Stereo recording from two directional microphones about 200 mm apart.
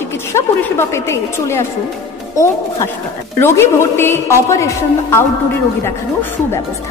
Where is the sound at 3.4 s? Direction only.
10° left (ahead or behind).